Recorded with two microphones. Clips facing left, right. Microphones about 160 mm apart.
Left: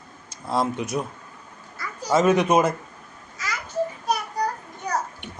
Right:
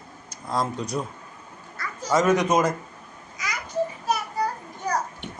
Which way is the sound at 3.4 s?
10° right (ahead or behind).